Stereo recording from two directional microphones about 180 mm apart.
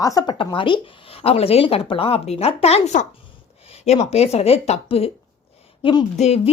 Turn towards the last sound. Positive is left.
turn(degrees=40)  # may be behind; listen again after turning